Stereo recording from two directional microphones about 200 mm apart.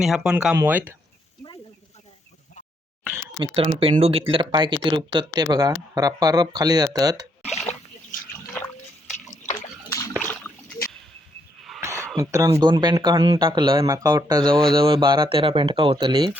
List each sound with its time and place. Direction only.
0.0 s speech: 5° right (ahead or behind)
3.3 s speech: 25° right (ahead or behind)
9.2 s a sound: 35° left (ahead or behind)
9.9 s rowboat: 15° left (ahead or behind)
11.8 s a sound: 15° right (ahead or behind)
12.1 s speech: 15° right (ahead or behind)